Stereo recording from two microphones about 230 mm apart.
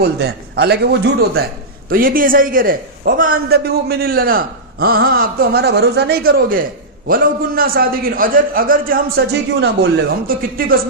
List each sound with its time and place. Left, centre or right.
0.0 s a man's voice: right